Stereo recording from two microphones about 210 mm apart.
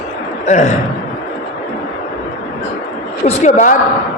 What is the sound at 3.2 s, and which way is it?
Speech, 35° left (ahead or behind).